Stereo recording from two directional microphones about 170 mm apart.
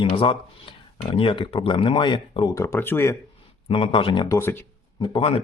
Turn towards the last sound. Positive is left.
turn(degrees=30)  # may be behind; listen again after turning